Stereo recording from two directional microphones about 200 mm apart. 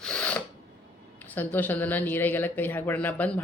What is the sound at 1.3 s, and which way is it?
Speech, 10° left (ahead or behind).